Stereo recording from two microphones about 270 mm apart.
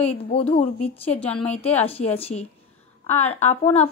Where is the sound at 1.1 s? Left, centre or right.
Centre.